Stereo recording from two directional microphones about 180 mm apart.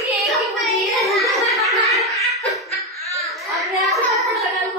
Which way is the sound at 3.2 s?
Centre (ahead or behind).